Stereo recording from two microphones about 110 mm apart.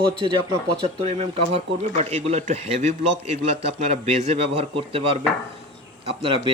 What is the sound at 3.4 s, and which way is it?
A man's voice, 70° right (ahead or behind).